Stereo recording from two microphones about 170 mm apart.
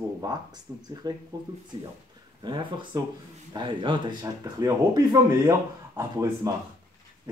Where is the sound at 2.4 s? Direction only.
25° right (ahead or behind).